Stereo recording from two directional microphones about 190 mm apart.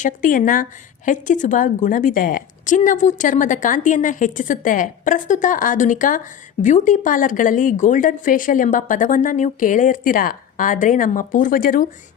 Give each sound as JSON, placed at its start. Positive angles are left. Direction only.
{"t": 0.0, "sound": "a woman's voice", "side_deg": 45}